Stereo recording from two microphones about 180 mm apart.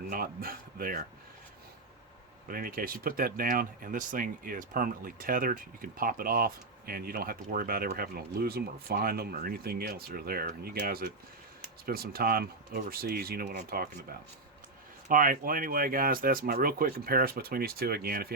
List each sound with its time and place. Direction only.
0.1 s speech: 55° right (ahead or behind)
2.5 s speech: 55° right (ahead or behind)